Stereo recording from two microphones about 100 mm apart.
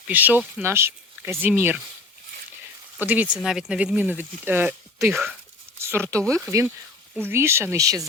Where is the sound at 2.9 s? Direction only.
15° right (ahead or behind).